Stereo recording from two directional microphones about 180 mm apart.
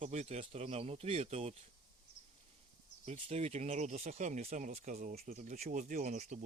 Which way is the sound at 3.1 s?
35° right (ahead or behind).